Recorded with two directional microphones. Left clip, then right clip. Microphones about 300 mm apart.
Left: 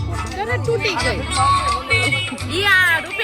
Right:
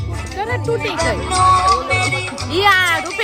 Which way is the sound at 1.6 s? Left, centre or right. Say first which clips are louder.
Right 6 dB; centre.